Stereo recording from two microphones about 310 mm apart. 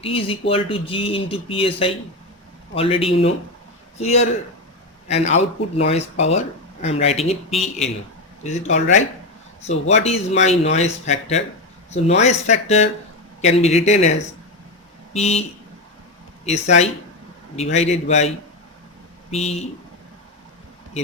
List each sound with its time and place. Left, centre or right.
0.0 s speech: centre
8.4 s speech: left